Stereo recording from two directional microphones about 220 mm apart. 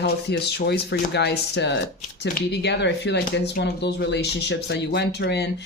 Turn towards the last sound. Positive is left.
turn(degrees=50)  # may be behind; listen again after turning